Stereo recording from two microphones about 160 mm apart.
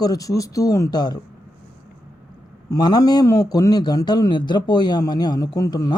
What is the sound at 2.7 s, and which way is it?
A man's voice, 25° left (ahead or behind).